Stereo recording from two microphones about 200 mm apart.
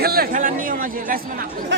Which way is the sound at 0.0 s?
50° right (ahead or behind).